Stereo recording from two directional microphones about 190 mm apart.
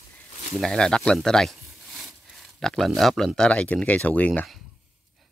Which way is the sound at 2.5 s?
Centre (ahead or behind).